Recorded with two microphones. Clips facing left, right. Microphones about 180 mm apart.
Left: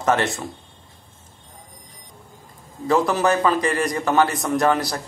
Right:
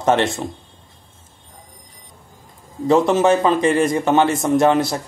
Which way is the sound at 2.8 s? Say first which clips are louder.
Right 4 dB; 20° right (ahead or behind).